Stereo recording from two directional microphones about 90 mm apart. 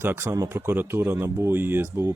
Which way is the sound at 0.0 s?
25° right (ahead or behind).